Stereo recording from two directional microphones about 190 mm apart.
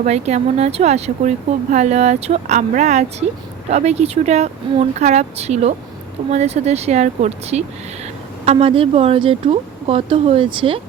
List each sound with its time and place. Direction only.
0.0 s speech: 40° right (ahead or behind)